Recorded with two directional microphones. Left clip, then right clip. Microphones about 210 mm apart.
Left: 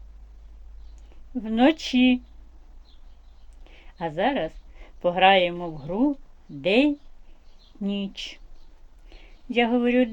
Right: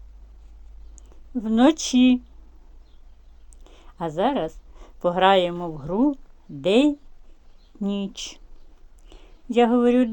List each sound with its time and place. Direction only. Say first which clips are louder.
1.5 s speech: right 2 dB; 25° right (ahead or behind)
3.6 s speech: right 1 dB; 25° right (ahead or behind)
9.0 s a sound: right 3 dB; 25° right (ahead or behind)